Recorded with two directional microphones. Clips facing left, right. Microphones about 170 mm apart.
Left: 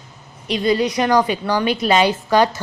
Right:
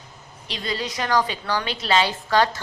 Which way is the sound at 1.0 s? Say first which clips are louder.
Left 6 dB; 15° left (ahead or behind).